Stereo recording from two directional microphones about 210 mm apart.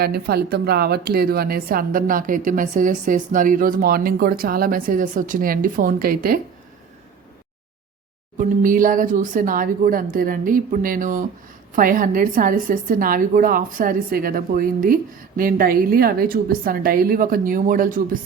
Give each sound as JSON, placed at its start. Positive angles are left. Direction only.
{"t": 0.0, "sound": "speech", "side_deg": -50}
{"t": 8.4, "sound": "a woman's voice", "side_deg": -40}